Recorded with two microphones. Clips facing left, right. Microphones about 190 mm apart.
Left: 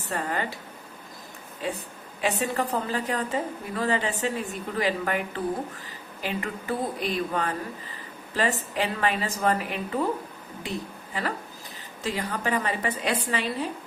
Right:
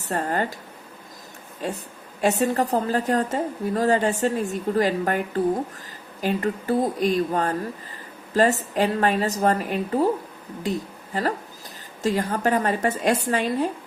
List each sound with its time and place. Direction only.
0.0 s a woman's voice: 45° right (ahead or behind)
2.2 s a woman's voice: 45° right (ahead or behind)